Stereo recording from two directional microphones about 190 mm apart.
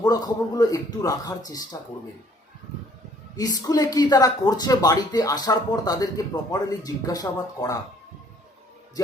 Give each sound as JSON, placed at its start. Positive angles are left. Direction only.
{"t": 0.0, "sound": "speech", "side_deg": 20}
{"t": 3.3, "sound": "speech", "side_deg": 20}